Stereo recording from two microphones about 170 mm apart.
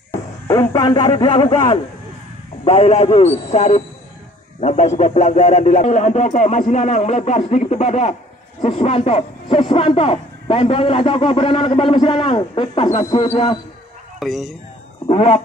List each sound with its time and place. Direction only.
0.1 s a man's voice: 15° left (ahead or behind); by 13.6 s 35° left (ahead or behind)
14.2 s speech: centre (ahead or behind)
15.0 s a man's voice: 35° left (ahead or behind)